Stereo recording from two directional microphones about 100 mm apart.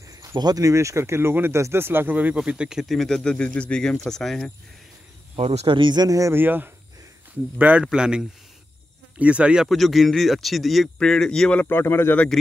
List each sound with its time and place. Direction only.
0.1 s speech: 35° right (ahead or behind); by 4.5 s 5° left (ahead or behind)
5.3 s speech: 90° right
5.8 s speech: 45° right (ahead or behind)
6.3 s speech: 20° right (ahead or behind)
9.7 s a man's voice: centre (ahead or behind)
11.7 s speech: 25° left (ahead or behind)